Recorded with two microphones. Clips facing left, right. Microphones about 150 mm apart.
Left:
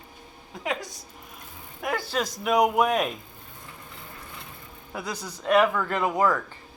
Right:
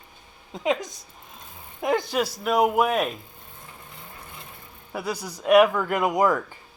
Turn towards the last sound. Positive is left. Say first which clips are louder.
# right 2 dB
turn(degrees=-15)  # may be behind; listen again after turning